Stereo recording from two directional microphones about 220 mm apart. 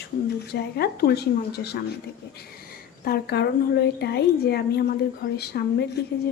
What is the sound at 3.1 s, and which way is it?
A woman's voice, 50° left (ahead or behind).